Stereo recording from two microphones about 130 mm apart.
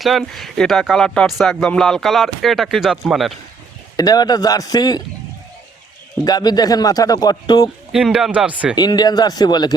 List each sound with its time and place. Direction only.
0.0 s speech: centre (ahead or behind)
3.9 s a man's voice: 30° left (ahead or behind)
6.2 s a man's voice: 30° left (ahead or behind)
7.9 s speech: 5° right (ahead or behind)
8.7 s a man's voice: 30° left (ahead or behind)